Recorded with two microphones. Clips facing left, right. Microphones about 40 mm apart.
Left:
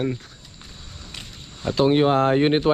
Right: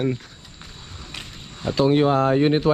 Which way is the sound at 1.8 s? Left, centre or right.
Left.